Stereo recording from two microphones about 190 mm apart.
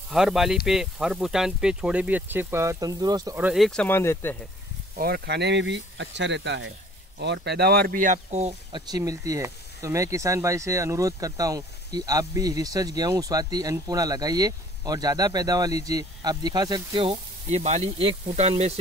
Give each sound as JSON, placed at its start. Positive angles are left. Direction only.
{"t": 0.1, "sound": "speech", "side_deg": 0}
{"t": 3.3, "sound": "speech", "side_deg": -5}
{"t": 4.9, "sound": "speech", "side_deg": -50}
{"t": 8.7, "sound": "speech", "side_deg": -20}